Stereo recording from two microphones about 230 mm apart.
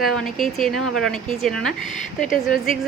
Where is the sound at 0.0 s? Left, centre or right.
Centre.